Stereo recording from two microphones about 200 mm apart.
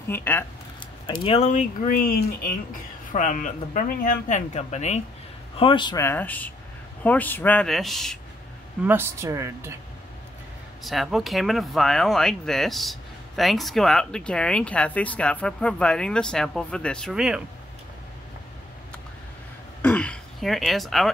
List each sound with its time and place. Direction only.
0.1 s a man's voice: 10° left (ahead or behind)
1.2 s a man's voice: 30° left (ahead or behind); by 8.2 s centre (ahead or behind)
8.8 s speech: 10° right (ahead or behind)
10.8 s speech: centre (ahead or behind)
19.8 s throat clearing: 5° left (ahead or behind)